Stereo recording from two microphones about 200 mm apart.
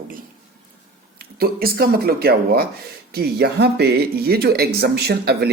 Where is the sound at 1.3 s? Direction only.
50° right (ahead or behind).